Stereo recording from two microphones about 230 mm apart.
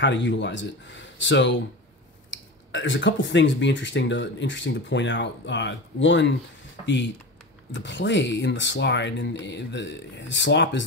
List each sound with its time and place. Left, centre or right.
0.0 s speech: left
7.7 s speech: left